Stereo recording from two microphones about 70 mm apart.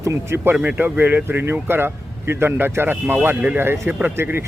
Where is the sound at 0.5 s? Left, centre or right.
Right.